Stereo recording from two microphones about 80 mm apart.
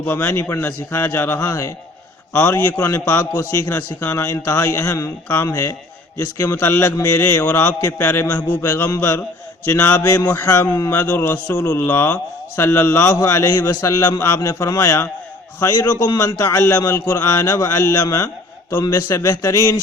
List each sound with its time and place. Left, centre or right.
0.0 s a man's voice: left
2.8 s speech: left
6.1 s speech: left
7.2 s a man's voice: left
10.5 s a man's voice: left
11.2 s a man's voice: left